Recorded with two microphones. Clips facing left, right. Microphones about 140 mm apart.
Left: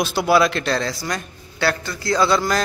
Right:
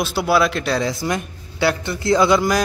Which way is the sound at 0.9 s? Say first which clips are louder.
Right 4 dB; 20° right (ahead or behind).